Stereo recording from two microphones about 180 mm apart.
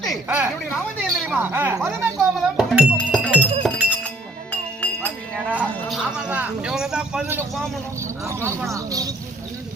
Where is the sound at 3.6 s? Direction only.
Centre (ahead or behind).